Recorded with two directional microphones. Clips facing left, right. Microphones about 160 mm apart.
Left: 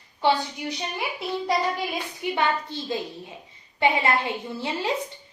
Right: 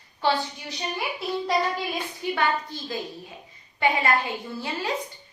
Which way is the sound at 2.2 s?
25° left (ahead or behind).